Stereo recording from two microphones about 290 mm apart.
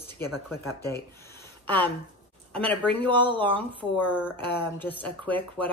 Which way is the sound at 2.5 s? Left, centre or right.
Centre.